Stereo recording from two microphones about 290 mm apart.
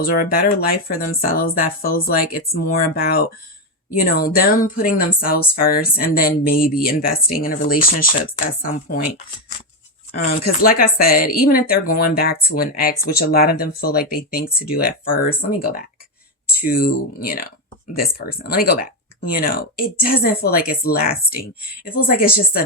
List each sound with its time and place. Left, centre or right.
0.0 s speech: left
10.2 s speech: left